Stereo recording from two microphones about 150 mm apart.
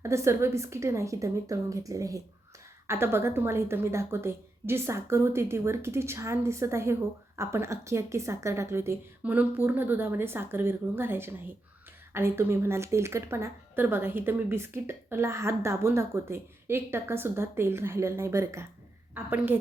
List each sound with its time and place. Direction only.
0.0 s a woman's voice: 20° right (ahead or behind)